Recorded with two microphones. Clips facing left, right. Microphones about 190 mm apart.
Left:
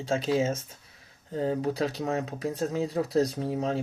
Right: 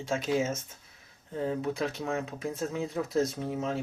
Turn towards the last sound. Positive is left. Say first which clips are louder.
# left 3 dB
turn(degrees=35)  # may be behind; listen again after turning